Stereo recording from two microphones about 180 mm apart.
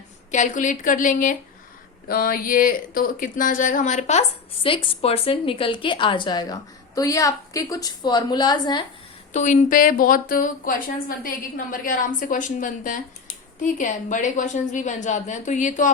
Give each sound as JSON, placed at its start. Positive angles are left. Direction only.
{"t": 0.3, "sound": "a woman's voice", "side_deg": 45}
{"t": 9.3, "sound": "a woman's voice", "side_deg": 40}